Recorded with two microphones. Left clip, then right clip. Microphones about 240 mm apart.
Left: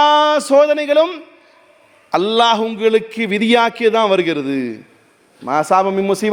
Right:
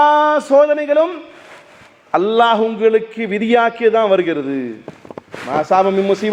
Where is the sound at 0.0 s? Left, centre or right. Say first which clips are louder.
Even; left.